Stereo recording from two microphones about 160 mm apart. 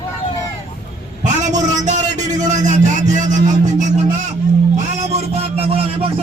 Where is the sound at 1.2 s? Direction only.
50° right (ahead or behind).